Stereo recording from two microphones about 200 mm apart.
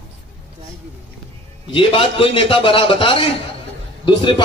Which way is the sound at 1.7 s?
25° left (ahead or behind).